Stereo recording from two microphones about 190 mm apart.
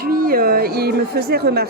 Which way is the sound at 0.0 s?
50° right (ahead or behind).